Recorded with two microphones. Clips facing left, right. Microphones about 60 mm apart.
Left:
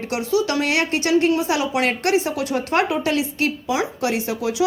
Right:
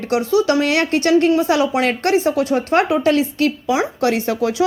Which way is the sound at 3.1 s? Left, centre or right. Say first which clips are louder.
Right 5 dB; right.